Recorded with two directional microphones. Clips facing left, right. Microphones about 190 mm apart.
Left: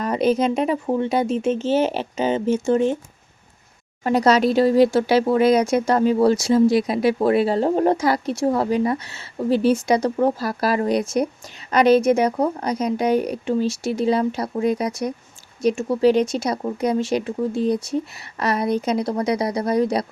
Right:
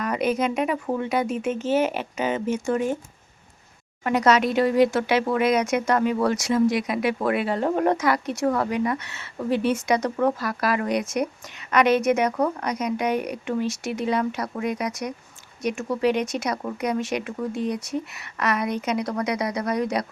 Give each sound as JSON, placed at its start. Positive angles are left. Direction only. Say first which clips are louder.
{"t": 0.0, "sound": "speech", "louder": "left 4 dB", "side_deg": 30}
{"t": 4.0, "sound": "speech", "louder": "left 3 dB", "side_deg": 30}